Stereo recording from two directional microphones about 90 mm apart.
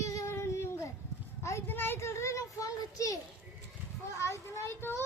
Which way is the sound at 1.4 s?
30° left (ahead or behind).